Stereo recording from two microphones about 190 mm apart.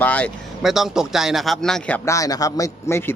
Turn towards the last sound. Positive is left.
turn(degrees=15)  # may be behind; listen again after turning